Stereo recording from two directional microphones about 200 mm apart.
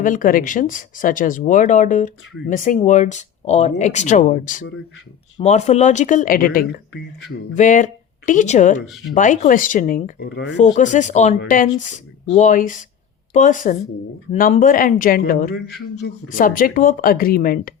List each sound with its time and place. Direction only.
0.0 s speech: 40° left (ahead or behind)
10.2 s speech: 65° left (ahead or behind)
10.8 s speech: 40° left (ahead or behind)
16.0 s speech: 60° left (ahead or behind)
16.3 s speech: 45° left (ahead or behind)